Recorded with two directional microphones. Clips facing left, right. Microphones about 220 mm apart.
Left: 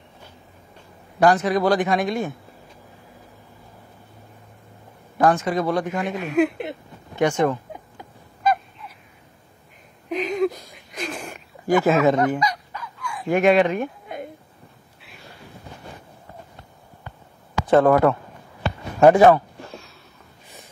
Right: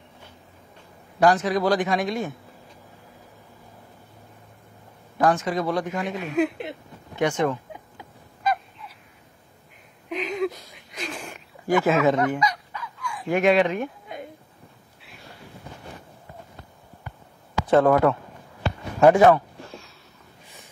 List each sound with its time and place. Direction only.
1.2 s speech: 55° left (ahead or behind)
5.2 s speech: 55° left (ahead or behind)
7.2 s speech: 45° left (ahead or behind)
10.0 s a sound: 40° left (ahead or behind)
13.3 s speech: 50° left (ahead or behind)
17.6 s speech: 50° left (ahead or behind)
18.9 s speech: 35° left (ahead or behind)